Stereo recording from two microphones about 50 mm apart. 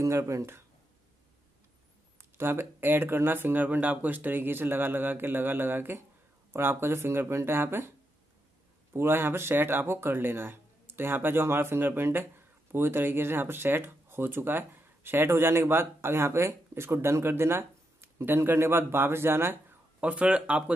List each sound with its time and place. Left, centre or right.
0.0 s speech: right
2.1 s speech: right
8.9 s speech: right
20.0 s speech: right